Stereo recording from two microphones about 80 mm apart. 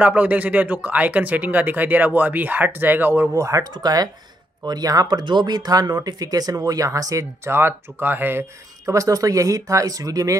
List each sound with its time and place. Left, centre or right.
0.0 s speech: centre
3.3 s speech: right
3.7 s speech: right
8.8 s speech: right